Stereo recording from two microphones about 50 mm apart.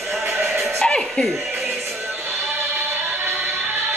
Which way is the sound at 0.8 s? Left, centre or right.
Centre.